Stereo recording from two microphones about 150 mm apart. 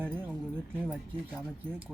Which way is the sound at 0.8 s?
5° left (ahead or behind).